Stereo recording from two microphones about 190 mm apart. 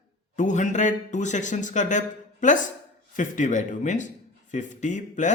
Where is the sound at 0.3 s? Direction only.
40° left (ahead or behind).